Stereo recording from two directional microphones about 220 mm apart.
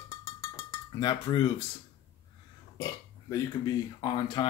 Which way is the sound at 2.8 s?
15° left (ahead or behind).